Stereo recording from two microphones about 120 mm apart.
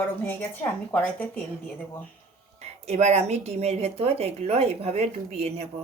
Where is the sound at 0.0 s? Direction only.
15° left (ahead or behind).